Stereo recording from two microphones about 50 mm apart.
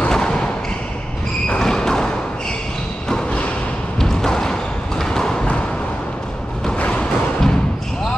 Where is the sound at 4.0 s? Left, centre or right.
Centre.